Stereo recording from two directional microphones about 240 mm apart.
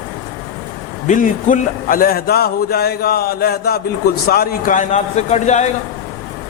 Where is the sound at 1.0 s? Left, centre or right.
Left.